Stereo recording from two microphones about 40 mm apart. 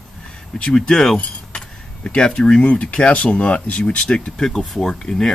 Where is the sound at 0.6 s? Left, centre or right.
Centre.